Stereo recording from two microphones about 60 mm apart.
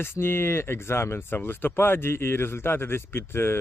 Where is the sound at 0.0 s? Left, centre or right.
Left.